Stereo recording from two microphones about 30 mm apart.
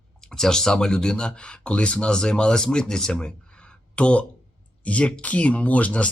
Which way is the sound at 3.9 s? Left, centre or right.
Left.